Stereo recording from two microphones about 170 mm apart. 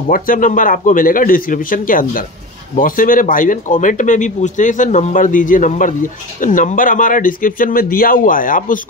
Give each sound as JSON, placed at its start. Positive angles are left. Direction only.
{"t": 0.1, "sound": "speech", "side_deg": 50}